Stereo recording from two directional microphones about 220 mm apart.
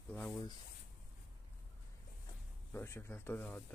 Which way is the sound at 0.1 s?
5° left (ahead or behind).